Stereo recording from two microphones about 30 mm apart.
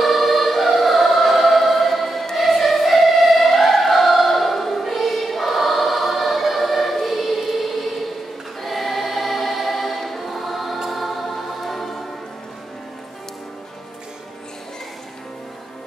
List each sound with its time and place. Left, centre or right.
0.0 s choir: centre
2.3 s music: centre
6.6 s choir: centre
10.9 s music: centre